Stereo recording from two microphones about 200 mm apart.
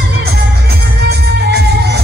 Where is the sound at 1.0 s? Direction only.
55° right (ahead or behind).